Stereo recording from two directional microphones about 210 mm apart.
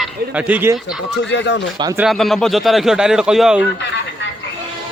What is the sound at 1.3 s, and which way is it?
Speech, 55° left (ahead or behind).